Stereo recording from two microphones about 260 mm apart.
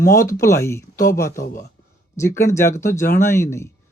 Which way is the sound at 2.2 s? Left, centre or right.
Centre.